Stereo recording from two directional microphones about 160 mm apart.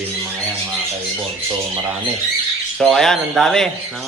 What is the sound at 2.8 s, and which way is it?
Speech, centre (ahead or behind).